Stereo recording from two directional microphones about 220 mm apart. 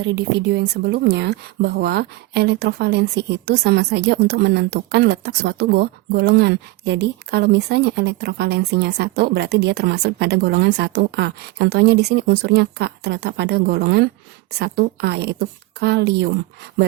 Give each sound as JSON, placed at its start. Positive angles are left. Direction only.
{"t": 0.0, "sound": "speech", "side_deg": -50}